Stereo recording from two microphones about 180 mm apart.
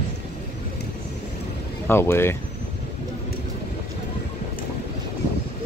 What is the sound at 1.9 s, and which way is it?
Speech, 15° left (ahead or behind).